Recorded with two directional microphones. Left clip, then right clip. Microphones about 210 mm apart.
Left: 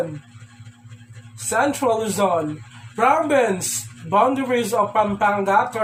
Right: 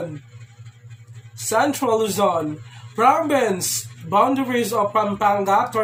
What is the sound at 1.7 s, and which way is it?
A man's voice, 15° right (ahead or behind).